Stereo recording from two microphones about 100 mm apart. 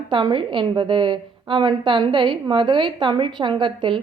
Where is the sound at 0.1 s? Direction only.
50° right (ahead or behind).